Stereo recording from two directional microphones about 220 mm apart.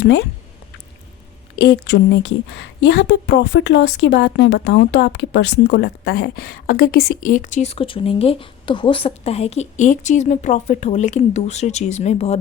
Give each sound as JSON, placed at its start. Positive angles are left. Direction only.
{"t": 1.5, "sound": "a woman's voice", "side_deg": 50}